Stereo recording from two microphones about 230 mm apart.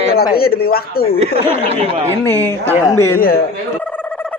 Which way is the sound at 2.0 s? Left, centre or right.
Centre.